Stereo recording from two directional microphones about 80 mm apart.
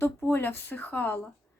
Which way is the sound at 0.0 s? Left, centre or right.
Left.